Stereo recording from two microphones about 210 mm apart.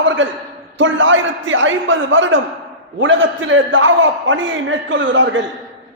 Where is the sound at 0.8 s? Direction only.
65° right (ahead or behind).